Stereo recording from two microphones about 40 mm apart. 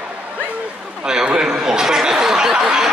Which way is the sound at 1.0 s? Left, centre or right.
Right.